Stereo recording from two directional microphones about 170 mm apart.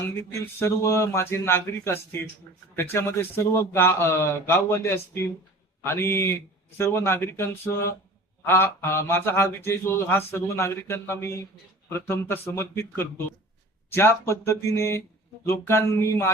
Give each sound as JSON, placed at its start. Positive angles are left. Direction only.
{"t": 0.2, "sound": "speech", "side_deg": 15}